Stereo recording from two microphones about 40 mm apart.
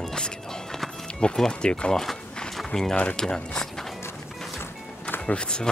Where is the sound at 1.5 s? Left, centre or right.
Left.